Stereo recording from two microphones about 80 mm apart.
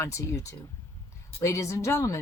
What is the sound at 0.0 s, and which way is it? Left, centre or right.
Speech, left.